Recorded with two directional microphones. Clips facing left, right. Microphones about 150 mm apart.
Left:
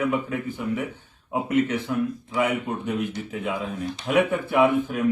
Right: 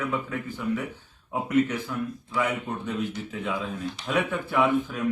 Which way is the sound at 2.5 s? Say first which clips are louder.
Left 4 dB; 60° left (ahead or behind).